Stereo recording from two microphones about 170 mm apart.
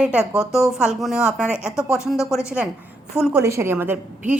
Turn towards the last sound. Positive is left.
turn(degrees=-10)  # may be behind; listen again after turning